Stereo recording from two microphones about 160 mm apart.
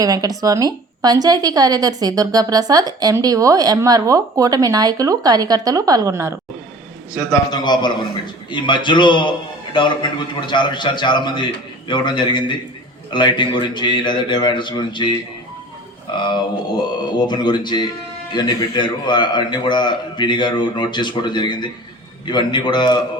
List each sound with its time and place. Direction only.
0.0 s a woman's voice: 25° right (ahead or behind)
7.1 s a man's voice: 20° left (ahead or behind)
16.1 s a man's voice: 30° left (ahead or behind)